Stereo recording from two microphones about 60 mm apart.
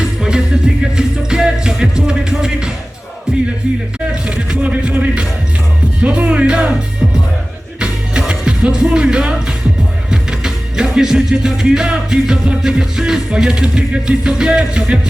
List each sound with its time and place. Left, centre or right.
0.2 s music: centre
4.1 s music: centre
6.0 s speech: right
7.8 s music: centre